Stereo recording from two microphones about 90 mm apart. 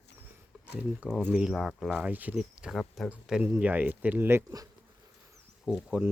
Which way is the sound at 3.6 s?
20° right (ahead or behind).